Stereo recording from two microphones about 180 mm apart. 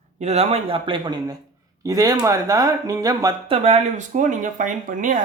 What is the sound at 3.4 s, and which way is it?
Speech, 35° right (ahead or behind).